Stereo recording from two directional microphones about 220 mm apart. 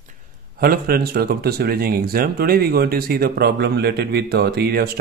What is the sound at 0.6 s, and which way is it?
Speech, 45° right (ahead or behind).